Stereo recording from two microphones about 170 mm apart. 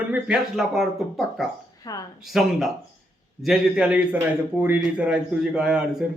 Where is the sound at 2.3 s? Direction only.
Centre (ahead or behind).